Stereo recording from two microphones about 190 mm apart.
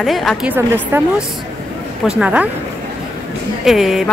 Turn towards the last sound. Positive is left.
turn(degrees=0)  # may be behind; listen again after turning